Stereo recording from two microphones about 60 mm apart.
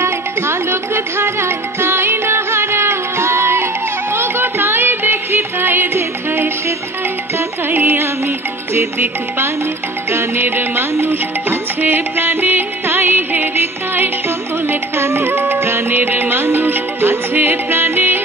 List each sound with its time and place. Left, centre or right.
0.0 s music: right
10.1 s music: right